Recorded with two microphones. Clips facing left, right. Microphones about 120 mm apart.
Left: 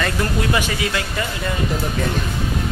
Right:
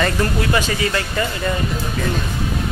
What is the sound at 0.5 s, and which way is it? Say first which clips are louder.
Speech: right 2 dB; 15° left (ahead or behind).